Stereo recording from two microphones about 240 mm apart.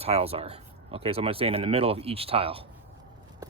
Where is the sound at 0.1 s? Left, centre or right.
Right.